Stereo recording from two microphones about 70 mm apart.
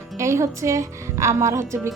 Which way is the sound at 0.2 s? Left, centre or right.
Right.